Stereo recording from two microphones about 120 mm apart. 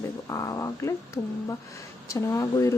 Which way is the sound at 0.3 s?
30° left (ahead or behind).